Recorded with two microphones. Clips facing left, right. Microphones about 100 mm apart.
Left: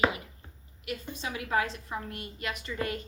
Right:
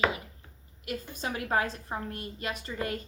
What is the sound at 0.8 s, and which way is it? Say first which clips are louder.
Speech: right 1 dB; 45° right (ahead or behind).